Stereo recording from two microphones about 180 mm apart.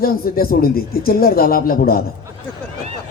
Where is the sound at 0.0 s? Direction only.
55° left (ahead or behind).